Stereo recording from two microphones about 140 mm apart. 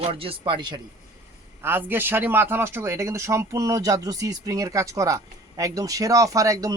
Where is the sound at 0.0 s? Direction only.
40° right (ahead or behind).